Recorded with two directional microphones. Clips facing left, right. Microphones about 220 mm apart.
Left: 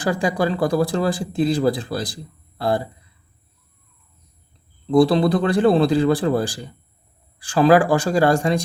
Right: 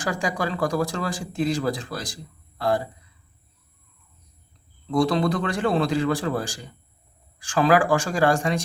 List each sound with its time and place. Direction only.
0.0 s speech: 30° left (ahead or behind)
4.9 s speech: 30° left (ahead or behind)